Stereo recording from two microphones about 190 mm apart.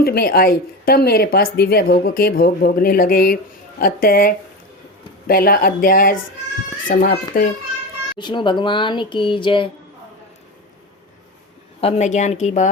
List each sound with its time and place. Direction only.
0.0 s a woman's voice: 50° left (ahead or behind)
8.2 s speech: 25° left (ahead or behind)
11.8 s a woman's voice: 35° left (ahead or behind)